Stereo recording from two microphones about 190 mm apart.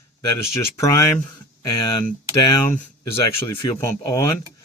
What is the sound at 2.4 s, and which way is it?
Speech, 20° left (ahead or behind).